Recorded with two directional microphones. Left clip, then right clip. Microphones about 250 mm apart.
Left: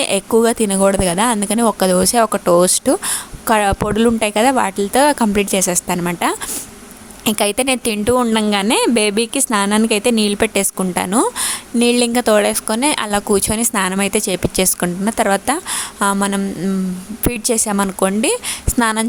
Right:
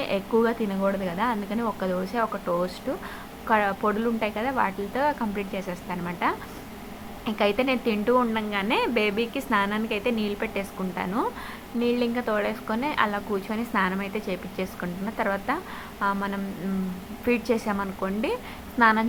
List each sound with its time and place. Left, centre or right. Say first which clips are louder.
0.0 s a woman's voice: left 9 dB; left